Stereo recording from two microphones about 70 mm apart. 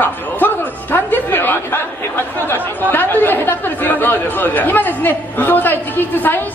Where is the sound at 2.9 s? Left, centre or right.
Left.